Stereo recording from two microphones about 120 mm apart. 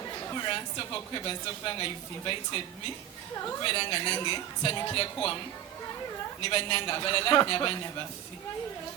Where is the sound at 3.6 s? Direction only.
40° left (ahead or behind).